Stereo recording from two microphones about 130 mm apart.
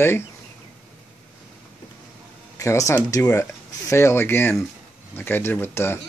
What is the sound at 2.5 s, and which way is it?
Speech, 25° left (ahead or behind).